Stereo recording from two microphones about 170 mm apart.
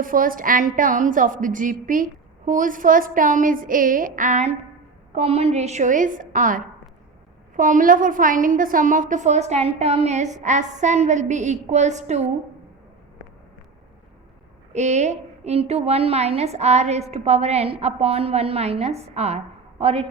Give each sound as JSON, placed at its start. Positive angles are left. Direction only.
{"t": 0.0, "sound": "a woman's voice", "side_deg": -55}
{"t": 14.7, "sound": "a woman's voice", "side_deg": -40}